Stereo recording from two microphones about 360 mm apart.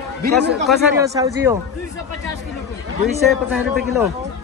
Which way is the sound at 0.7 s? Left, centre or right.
Centre.